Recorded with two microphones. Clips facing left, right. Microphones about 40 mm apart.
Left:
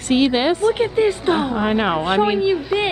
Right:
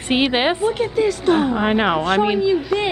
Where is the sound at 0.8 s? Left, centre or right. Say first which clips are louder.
Left 1 dB; left.